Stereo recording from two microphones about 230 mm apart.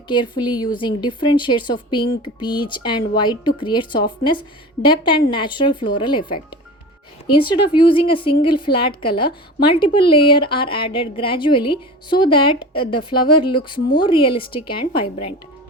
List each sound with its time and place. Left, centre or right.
0.1 s a woman's voice: centre